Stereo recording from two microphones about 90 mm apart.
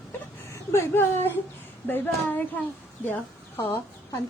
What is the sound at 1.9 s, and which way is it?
Speech, 20° left (ahead or behind).